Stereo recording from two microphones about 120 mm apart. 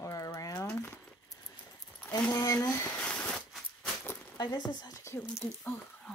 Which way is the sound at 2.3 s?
30° left (ahead or behind).